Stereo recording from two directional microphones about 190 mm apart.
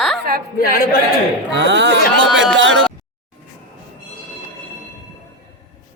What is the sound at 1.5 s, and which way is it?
Speech, 70° right (ahead or behind).